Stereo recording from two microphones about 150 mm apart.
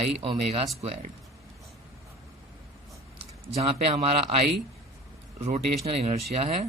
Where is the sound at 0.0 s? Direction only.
40° right (ahead or behind).